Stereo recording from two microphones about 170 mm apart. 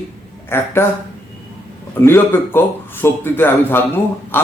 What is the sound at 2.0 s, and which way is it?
Speech, 15° left (ahead or behind).